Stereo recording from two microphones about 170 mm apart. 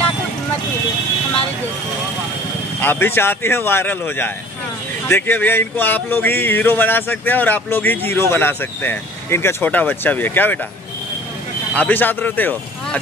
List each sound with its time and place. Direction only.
2.8 s speech: 10° left (ahead or behind)
11.7 s speech: 10° left (ahead or behind)